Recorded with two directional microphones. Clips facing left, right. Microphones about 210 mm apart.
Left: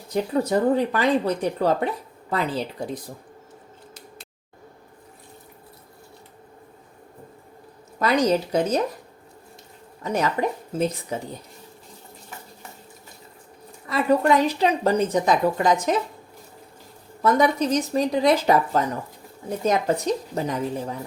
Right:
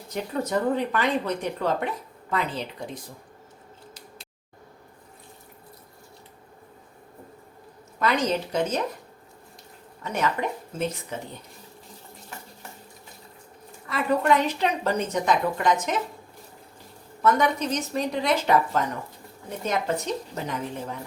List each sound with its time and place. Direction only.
0.1 s speech: 35° left (ahead or behind)
7.9 s speech: 40° left (ahead or behind)
10.0 s speech: 35° left (ahead or behind)
13.8 s speech: 35° left (ahead or behind)
17.2 s speech: 35° left (ahead or behind)